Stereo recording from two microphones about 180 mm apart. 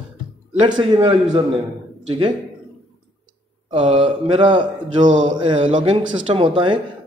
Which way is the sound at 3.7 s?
30° right (ahead or behind).